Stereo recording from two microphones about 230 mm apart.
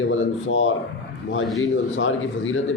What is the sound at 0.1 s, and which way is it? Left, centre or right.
Speech, left.